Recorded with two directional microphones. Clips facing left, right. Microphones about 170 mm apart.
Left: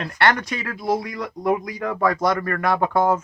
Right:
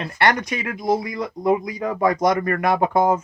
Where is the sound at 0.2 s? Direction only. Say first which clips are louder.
Right 1 dB; 15° right (ahead or behind).